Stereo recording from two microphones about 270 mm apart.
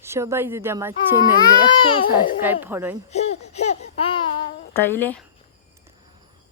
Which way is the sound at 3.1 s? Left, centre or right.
Left.